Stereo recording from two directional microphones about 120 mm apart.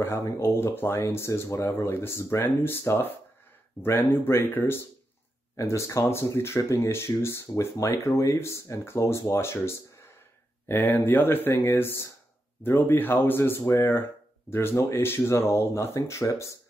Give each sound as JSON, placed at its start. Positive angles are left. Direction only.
{"t": 0.0, "sound": "speech", "side_deg": 20}